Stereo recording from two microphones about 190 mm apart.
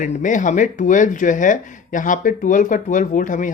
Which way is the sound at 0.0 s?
40° left (ahead or behind).